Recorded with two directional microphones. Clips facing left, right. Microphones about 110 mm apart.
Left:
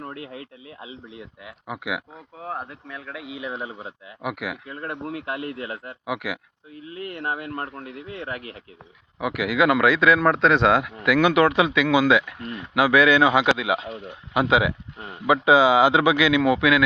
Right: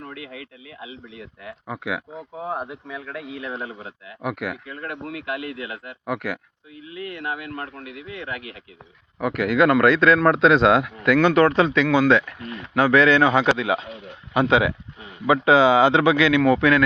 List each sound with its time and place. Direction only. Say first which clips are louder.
0.0 s a man's voice: left 1 dB; 30° left (ahead or behind)
1.5 s a man's voice: right 1 dB; 10° left (ahead or behind)
2.4 s speech: right 3 dB; 15° right (ahead or behind)
2.8 s a man's voice: right 3 dB; centre (ahead or behind)
4.6 s a man's voice: left 1 dB; 30° left (ahead or behind)
6.1 s a man's voice: right 2 dB; 5° left (ahead or behind)
6.9 s a man's voice: even; 35° left (ahead or behind)
9.2 s a man's voice: right 2 dB; 5° left (ahead or behind)